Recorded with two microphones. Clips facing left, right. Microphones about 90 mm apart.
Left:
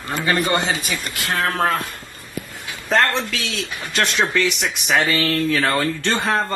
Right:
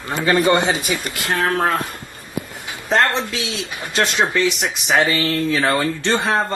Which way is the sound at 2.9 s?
20° right (ahead or behind).